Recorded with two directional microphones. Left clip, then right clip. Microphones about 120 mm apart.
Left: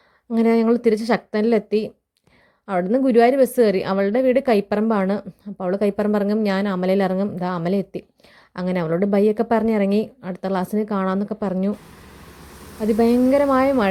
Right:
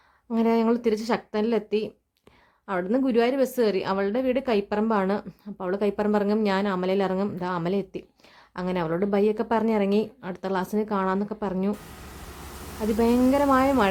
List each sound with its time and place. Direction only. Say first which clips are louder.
0.3 s a woman's voice: left 5 dB; 35° left (ahead or behind)
13.0 s a woman's voice: left 5 dB; 30° left (ahead or behind)